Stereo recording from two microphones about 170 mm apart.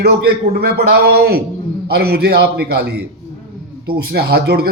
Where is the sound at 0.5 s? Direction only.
70° right (ahead or behind).